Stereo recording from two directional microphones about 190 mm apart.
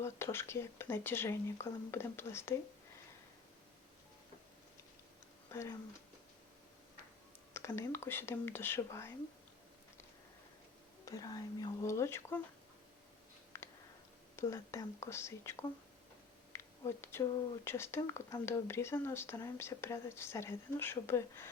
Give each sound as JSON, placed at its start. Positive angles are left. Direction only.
{"t": 0.0, "sound": "speech", "side_deg": 15}
{"t": 5.5, "sound": "speech", "side_deg": 15}
{"t": 7.5, "sound": "speech", "side_deg": 15}
{"t": 11.0, "sound": "speech", "side_deg": 20}
{"t": 13.5, "sound": "a sound", "side_deg": 15}
{"t": 14.3, "sound": "speech", "side_deg": 15}
{"t": 16.5, "sound": "a sound", "side_deg": 15}
{"t": 17.7, "sound": "speech", "side_deg": 15}